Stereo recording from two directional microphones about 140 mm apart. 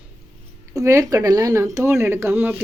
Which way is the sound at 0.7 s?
20° right (ahead or behind).